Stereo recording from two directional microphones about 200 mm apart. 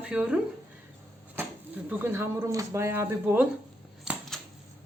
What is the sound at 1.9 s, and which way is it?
Speech, 10° right (ahead or behind).